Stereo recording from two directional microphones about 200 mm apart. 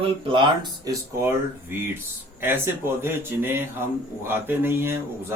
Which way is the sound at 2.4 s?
10° right (ahead or behind).